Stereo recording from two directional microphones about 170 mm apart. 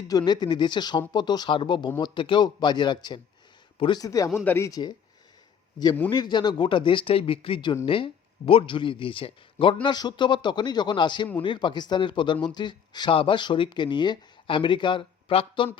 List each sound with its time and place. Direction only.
0.1 s speech: 25° left (ahead or behind)
6.1 s speech: 25° left (ahead or behind)